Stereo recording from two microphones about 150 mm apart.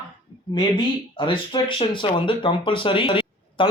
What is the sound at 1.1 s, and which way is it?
Speech, 35° left (ahead or behind).